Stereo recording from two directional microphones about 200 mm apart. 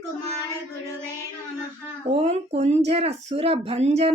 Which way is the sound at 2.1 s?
30° right (ahead or behind).